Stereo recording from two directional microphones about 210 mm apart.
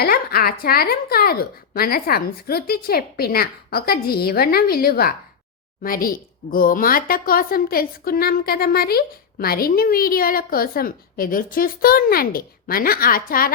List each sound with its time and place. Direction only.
0.0 s a woman's voice: 45° left (ahead or behind)